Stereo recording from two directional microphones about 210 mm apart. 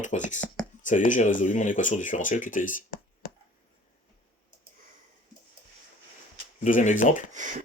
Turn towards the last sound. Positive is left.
turn(degrees=-35)  # may be behind; listen again after turning